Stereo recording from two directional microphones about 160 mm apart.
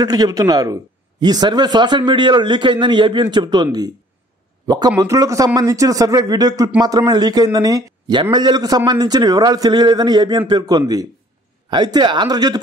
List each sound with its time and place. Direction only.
0.0 s a man's voice: 25° right (ahead or behind)